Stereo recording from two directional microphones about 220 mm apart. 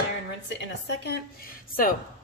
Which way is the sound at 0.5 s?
50° left (ahead or behind).